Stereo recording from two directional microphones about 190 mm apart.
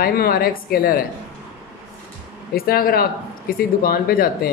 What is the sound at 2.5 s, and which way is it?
Speech, 50° left (ahead or behind).